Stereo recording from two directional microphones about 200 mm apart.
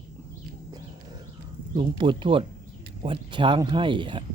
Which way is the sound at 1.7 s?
25° right (ahead or behind).